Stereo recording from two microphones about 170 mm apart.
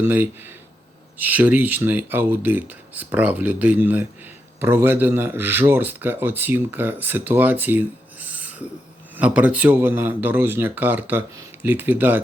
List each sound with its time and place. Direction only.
0.0 s speech: 10° right (ahead or behind)